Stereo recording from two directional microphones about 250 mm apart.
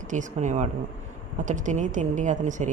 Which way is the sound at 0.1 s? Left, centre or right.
Right.